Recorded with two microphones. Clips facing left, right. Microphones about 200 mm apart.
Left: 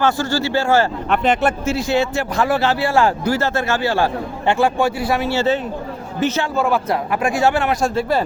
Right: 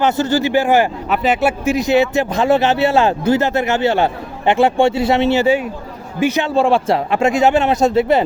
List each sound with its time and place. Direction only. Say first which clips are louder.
0.0 s speech: right 3 dB; 20° right (ahead or behind)
1.1 s a man's voice: right 1 dB; 5° right (ahead or behind)
6.5 s a man's voice: right 4 dB; 30° right (ahead or behind)